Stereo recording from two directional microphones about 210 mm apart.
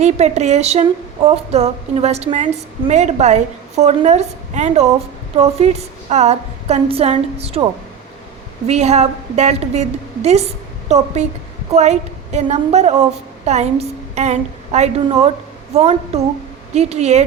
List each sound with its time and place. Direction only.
0.0 s a woman's voice: 30° right (ahead or behind)